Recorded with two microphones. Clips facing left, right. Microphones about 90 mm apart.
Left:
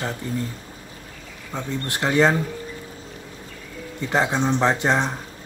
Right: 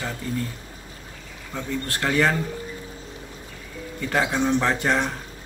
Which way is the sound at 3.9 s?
20° left (ahead or behind).